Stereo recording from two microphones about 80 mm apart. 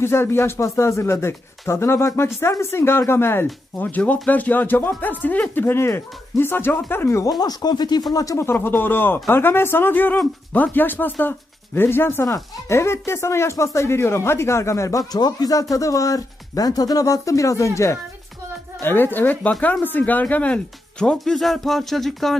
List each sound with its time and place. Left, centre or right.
0.0 s speech: left
7.2 s speech: left
8.1 s speech: left
15.1 s speech: left
15.7 s speech: left
18.8 s speech: left
21.2 s speech: centre